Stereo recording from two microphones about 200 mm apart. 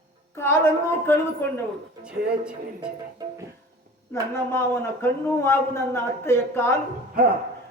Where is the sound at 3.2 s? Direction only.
20° right (ahead or behind).